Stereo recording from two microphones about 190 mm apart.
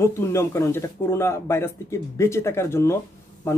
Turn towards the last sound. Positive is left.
turn(degrees=15)  # may be behind; listen again after turning